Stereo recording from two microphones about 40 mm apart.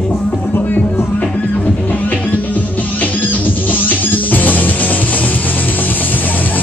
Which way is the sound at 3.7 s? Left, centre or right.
Left.